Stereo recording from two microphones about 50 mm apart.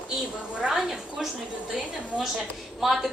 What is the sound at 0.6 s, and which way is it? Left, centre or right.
Speech, centre.